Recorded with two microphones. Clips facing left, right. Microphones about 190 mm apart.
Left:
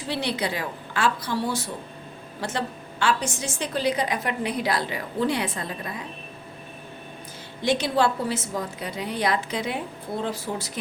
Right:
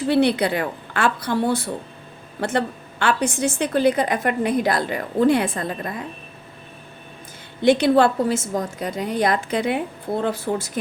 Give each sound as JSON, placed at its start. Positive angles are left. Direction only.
{"t": 0.1, "sound": "a woman's voice", "side_deg": -55}
{"t": 7.6, "sound": "a woman's voice", "side_deg": -60}